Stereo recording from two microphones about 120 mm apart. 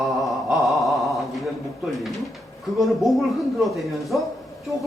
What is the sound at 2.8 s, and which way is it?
Speech, centre (ahead or behind).